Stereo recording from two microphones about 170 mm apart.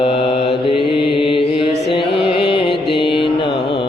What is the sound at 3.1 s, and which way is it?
Mantra, 30° left (ahead or behind).